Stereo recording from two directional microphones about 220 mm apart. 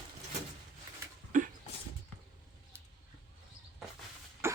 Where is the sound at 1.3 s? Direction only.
35° right (ahead or behind).